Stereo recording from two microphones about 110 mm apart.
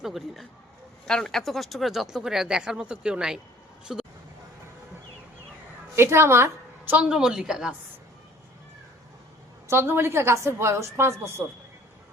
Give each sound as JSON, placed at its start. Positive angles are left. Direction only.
{"t": 0.0, "sound": "speech", "side_deg": 0}
{"t": 6.0, "sound": "a woman's voice", "side_deg": -20}
{"t": 6.9, "sound": "speech", "side_deg": -10}
{"t": 9.6, "sound": "a woman's voice", "side_deg": -20}